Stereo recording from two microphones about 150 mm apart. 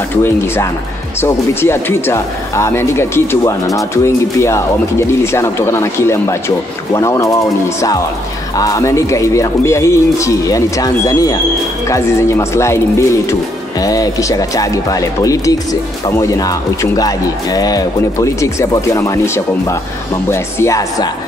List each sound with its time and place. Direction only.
0.1 s speech: 15° left (ahead or behind)
8.5 s speech: 20° left (ahead or behind)